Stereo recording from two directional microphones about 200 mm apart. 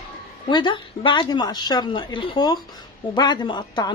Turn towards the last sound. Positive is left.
turn(degrees=20)  # may be behind; listen again after turning